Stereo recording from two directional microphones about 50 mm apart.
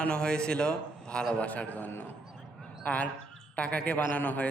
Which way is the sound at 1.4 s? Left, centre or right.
Left.